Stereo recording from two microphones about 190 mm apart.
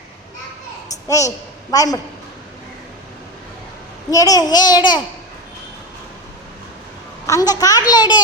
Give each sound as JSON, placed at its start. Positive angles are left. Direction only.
{"t": 1.0, "sound": "a woman's voice", "side_deg": 15}
{"t": 4.1, "sound": "a child's voice", "side_deg": 20}
{"t": 7.3, "sound": "a child's voice", "side_deg": 20}